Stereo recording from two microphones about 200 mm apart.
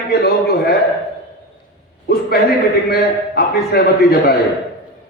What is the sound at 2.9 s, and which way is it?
A man's voice, 50° left (ahead or behind).